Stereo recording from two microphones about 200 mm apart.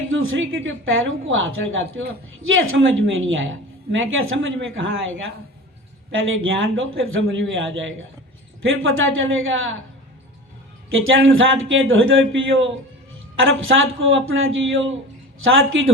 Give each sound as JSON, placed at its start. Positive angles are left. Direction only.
{"t": 0.1, "sound": "a woman's voice", "side_deg": -75}
{"t": 8.6, "sound": "a woman's voice", "side_deg": -85}
{"t": 10.8, "sound": "speech", "side_deg": -80}